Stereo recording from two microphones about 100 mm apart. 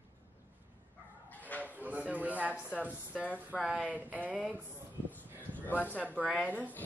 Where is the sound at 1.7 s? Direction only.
15° right (ahead or behind).